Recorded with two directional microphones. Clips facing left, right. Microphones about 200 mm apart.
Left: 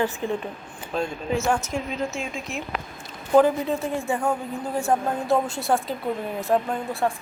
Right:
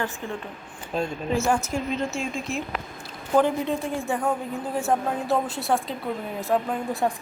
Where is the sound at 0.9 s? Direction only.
5° right (ahead or behind).